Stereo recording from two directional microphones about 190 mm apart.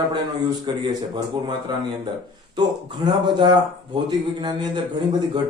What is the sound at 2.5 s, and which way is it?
A man's voice, 25° right (ahead or behind).